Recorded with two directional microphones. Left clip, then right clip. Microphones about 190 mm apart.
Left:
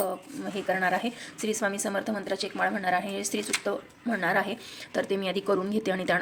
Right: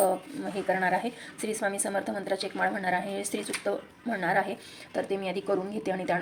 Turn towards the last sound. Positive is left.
turn(degrees=20)  # may be behind; listen again after turning